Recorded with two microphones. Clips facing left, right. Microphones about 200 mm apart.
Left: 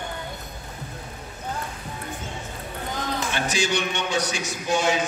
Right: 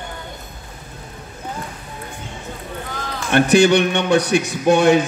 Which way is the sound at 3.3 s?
60° right (ahead or behind).